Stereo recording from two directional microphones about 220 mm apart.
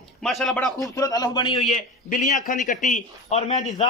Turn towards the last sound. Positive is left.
turn(degrees=30)  # may be behind; listen again after turning